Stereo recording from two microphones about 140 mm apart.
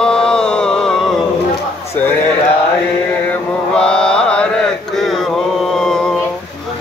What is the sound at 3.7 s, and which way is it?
Mantra, 5° left (ahead or behind).